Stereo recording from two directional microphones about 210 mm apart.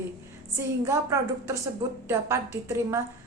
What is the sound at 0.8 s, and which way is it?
A woman's voice, 15° right (ahead or behind).